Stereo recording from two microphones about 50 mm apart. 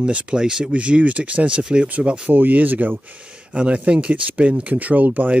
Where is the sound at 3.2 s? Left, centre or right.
Right.